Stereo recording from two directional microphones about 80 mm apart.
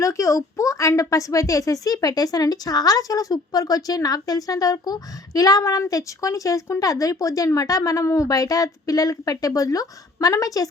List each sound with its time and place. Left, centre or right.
0.0 s a woman's voice: left